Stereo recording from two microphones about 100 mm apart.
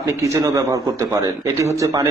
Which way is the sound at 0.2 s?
35° right (ahead or behind).